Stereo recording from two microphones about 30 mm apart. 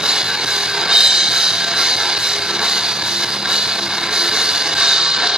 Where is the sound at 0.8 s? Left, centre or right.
Right.